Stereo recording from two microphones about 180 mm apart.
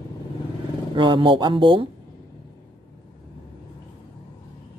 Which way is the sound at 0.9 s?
25° right (ahead or behind).